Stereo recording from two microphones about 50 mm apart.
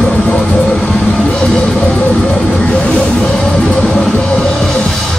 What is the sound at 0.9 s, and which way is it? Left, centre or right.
Music, left.